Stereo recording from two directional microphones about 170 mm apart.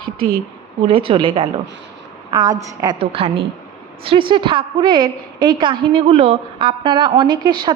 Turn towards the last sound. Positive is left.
turn(degrees=-25)  # may be behind; listen again after turning